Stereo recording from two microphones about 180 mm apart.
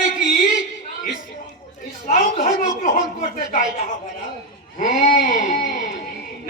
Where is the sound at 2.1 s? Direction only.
45° left (ahead or behind).